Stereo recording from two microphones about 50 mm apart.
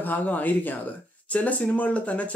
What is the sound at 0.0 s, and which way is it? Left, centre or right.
Speech, left.